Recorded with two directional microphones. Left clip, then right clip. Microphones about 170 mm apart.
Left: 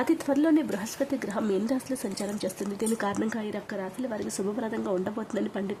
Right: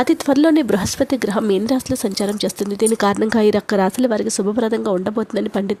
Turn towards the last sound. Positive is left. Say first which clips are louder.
# right 10 dB
turn(degrees=-40)  # may be behind; listen again after turning